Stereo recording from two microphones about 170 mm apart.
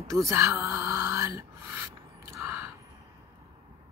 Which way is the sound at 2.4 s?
15° right (ahead or behind).